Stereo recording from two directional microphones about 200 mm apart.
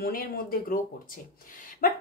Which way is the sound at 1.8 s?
45° left (ahead or behind).